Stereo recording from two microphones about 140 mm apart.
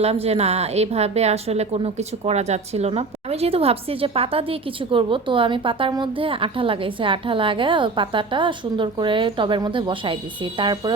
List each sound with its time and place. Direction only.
0.0 s a woman's voice: 45° right (ahead or behind)